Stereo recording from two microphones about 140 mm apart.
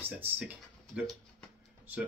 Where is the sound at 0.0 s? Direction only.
15° right (ahead or behind).